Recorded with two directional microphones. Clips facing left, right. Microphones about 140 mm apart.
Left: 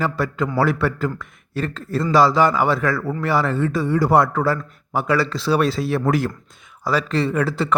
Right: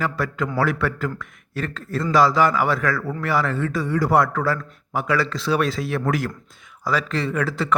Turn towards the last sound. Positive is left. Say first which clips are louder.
# left 2 dB
turn(degrees=30)  # may be behind; listen again after turning